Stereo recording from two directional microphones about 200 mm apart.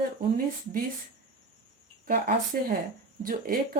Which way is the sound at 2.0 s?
50° right (ahead or behind).